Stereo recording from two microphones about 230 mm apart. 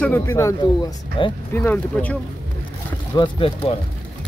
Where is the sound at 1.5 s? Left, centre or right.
Centre.